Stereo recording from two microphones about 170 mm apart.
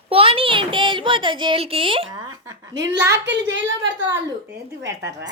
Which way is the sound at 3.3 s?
90° right.